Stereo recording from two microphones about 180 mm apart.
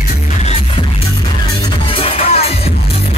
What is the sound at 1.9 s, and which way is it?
Music, 30° left (ahead or behind).